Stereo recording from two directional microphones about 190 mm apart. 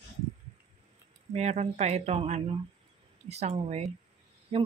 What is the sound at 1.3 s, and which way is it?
A woman's voice, 35° right (ahead or behind).